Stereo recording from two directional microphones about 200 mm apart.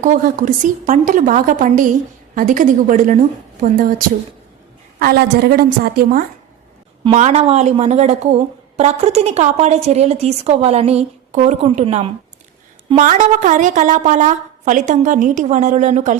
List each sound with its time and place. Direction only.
0.0 s a woman's voice: 40° right (ahead or behind)
4.9 s a woman's voice: 50° right (ahead or behind)
7.0 s speech: 35° right (ahead or behind)